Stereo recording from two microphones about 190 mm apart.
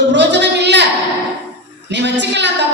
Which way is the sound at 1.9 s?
65° right (ahead or behind).